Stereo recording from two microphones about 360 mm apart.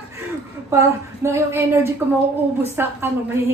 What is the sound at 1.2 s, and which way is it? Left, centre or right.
A woman's voice, centre.